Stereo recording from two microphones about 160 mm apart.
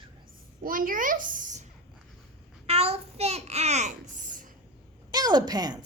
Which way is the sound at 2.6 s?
40° right (ahead or behind).